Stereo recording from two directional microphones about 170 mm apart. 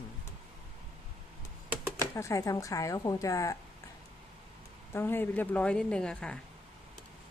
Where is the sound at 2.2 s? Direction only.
20° left (ahead or behind).